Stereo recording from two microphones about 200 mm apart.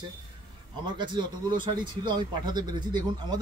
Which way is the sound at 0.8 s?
25° right (ahead or behind).